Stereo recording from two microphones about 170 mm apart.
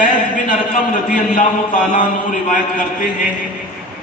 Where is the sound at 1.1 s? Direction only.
50° left (ahead or behind).